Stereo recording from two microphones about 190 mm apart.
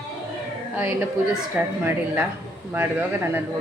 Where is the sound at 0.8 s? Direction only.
10° right (ahead or behind).